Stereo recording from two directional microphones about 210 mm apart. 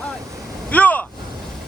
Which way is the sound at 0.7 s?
5° left (ahead or behind).